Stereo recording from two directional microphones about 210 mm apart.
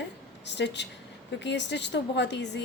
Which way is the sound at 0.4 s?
55° left (ahead or behind).